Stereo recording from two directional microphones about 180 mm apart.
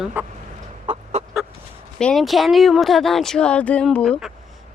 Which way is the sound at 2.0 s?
5° left (ahead or behind).